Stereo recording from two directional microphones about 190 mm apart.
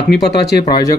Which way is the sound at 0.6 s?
20° left (ahead or behind).